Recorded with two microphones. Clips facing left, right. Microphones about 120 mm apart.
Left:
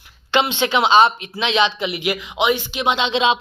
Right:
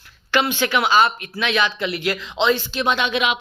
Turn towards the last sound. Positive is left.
turn(degrees=25)  # may be behind; listen again after turning